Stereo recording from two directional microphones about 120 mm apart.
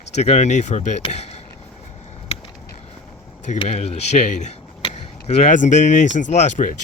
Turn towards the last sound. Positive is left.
turn(degrees=80)